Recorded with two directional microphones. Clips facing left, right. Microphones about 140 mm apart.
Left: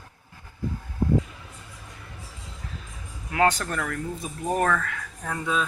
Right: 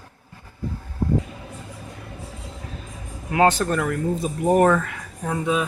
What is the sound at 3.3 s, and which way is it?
Speech, 25° right (ahead or behind).